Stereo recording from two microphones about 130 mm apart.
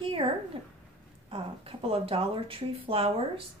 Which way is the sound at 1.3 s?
45° right (ahead or behind).